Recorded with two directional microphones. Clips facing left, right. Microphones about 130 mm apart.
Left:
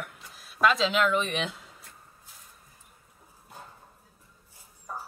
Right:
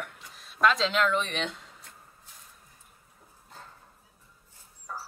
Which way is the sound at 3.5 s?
15° left (ahead or behind).